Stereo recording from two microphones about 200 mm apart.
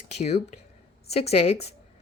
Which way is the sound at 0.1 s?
35° left (ahead or behind).